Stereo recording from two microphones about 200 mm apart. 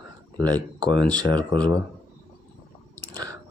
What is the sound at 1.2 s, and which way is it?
Speech, 25° right (ahead or behind).